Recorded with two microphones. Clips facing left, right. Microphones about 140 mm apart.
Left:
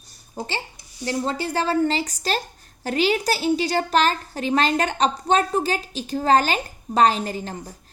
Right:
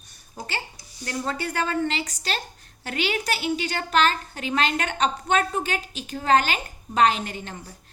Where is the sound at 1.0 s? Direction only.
30° left (ahead or behind).